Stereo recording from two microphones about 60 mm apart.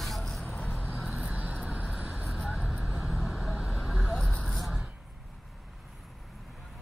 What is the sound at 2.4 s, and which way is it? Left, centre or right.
Vehicle, centre.